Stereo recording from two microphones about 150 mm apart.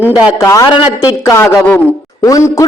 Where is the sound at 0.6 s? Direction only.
35° left (ahead or behind).